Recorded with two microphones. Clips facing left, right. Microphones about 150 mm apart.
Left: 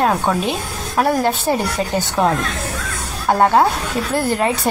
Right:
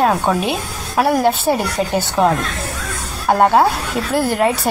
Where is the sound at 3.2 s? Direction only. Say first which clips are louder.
Right 1 dB; 10° right (ahead or behind).